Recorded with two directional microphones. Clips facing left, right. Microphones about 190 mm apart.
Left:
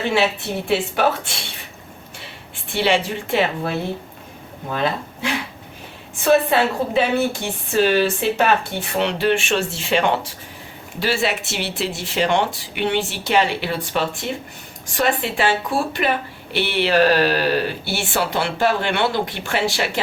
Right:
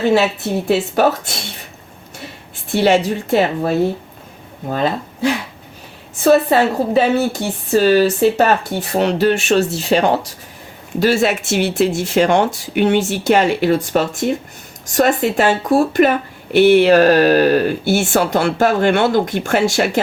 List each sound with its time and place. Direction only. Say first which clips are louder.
0.7 s a woman's voice: right 4 dB; 40° right (ahead or behind)
2.7 s a woman's voice: right 6 dB; 40° right (ahead or behind)